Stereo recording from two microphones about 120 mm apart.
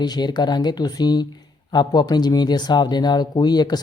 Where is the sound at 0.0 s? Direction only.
35° left (ahead or behind).